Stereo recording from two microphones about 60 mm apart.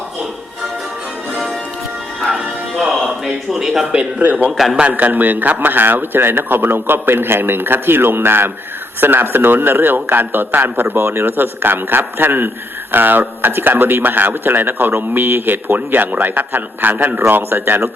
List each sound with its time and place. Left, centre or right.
3.2 s speech: centre
4.2 s a man's voice: right
4.5 s speech: centre
4.8 s speech: right